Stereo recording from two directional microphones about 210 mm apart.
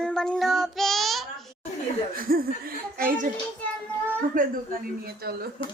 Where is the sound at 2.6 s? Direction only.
40° right (ahead or behind).